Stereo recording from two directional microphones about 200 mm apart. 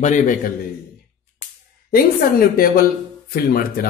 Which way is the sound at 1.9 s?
45° left (ahead or behind).